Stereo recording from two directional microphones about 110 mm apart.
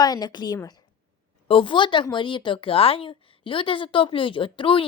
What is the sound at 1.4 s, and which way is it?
A woman's voice, 55° left (ahead or behind).